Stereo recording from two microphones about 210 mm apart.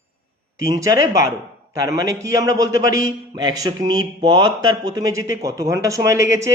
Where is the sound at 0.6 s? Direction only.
15° right (ahead or behind).